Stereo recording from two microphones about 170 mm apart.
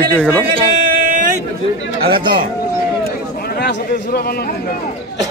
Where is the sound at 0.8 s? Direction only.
55° right (ahead or behind).